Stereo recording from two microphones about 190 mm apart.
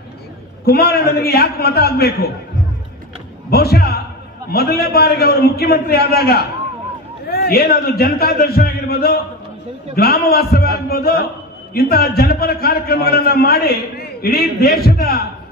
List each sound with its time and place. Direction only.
0.7 s a man's voice: 55° left (ahead or behind)
3.4 s a man's voice: 55° left (ahead or behind)